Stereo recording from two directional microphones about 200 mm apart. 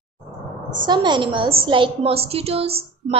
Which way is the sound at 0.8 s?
20° right (ahead or behind).